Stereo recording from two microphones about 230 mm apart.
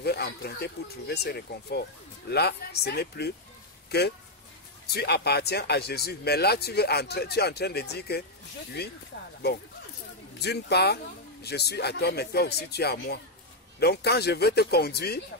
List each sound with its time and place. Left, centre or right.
0.0 s speech: left
10.4 s speech: left